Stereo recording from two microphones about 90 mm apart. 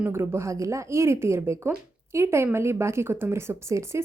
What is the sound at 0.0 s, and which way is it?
Speech, 25° right (ahead or behind).